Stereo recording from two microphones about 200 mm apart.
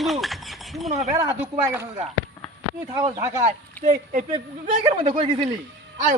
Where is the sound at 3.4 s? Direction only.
40° right (ahead or behind).